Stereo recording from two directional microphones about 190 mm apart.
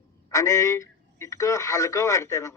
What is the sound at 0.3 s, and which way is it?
A man's voice, 15° left (ahead or behind).